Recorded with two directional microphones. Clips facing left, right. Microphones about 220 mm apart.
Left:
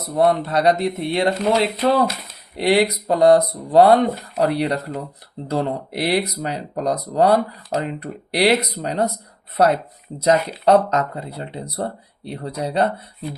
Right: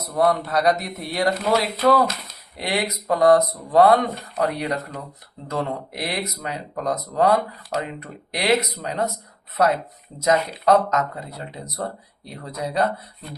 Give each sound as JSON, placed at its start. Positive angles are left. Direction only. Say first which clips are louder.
{"t": 0.0, "sound": "speech", "louder": "left 3 dB", "side_deg": 25}
{"t": 10.2, "sound": "speech", "louder": "left 3 dB", "side_deg": 30}